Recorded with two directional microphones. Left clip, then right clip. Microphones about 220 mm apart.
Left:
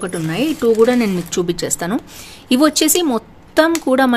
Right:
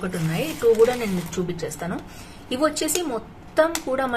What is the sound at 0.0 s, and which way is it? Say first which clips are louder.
Speech: left 7 dB; 55° left (ahead or behind).